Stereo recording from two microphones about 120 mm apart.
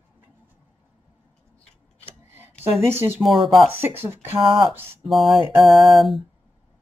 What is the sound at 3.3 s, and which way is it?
Speech, 45° right (ahead or behind).